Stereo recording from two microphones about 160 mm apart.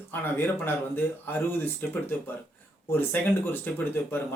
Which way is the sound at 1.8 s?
10° left (ahead or behind).